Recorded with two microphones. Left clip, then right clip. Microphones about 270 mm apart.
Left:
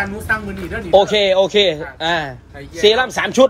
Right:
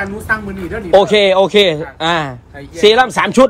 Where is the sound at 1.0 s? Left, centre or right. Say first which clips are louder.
Right 3 dB; centre.